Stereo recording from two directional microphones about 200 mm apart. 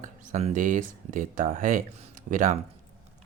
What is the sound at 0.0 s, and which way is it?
Speech, 35° right (ahead or behind).